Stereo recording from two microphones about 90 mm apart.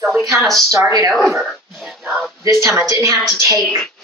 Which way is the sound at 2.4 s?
30° right (ahead or behind).